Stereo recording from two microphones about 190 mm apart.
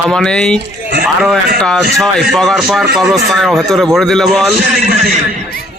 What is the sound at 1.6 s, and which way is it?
Speech, 5° left (ahead or behind).